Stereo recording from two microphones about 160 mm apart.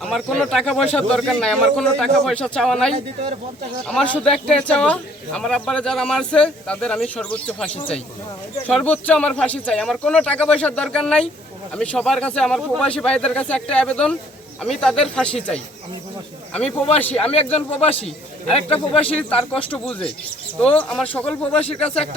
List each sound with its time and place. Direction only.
0.0 s speech: centre (ahead or behind)
17.0 s speech: 10° left (ahead or behind)
17.3 s speech: 40° left (ahead or behind)
18.9 s speech: 35° left (ahead or behind)
19.7 s speech: 10° left (ahead or behind)
21.8 s speech: 40° left (ahead or behind)